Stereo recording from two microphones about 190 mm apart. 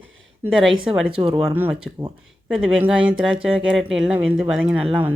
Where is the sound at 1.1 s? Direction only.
30° right (ahead or behind).